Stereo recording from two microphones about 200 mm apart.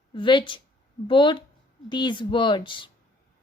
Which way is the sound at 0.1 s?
25° left (ahead or behind).